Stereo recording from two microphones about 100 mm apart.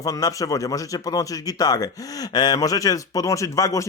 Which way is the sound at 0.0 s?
35° left (ahead or behind).